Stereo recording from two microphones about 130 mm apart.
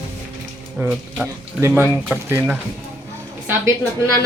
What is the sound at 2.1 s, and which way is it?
Speech, 15° right (ahead or behind).